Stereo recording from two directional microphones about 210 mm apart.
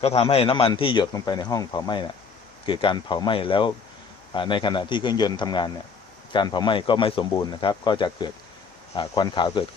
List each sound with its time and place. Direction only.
0.0 s a man's voice: 25° left (ahead or behind)